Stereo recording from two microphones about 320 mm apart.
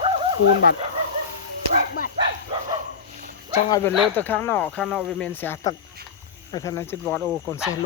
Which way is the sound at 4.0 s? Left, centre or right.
Centre.